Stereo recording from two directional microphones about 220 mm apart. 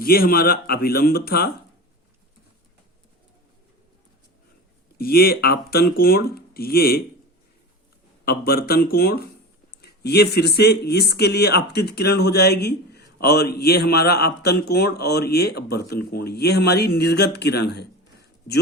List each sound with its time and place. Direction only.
0.0 s speech: 45° left (ahead or behind)
4.9 s speech: 45° left (ahead or behind)
8.2 s speech: 45° left (ahead or behind)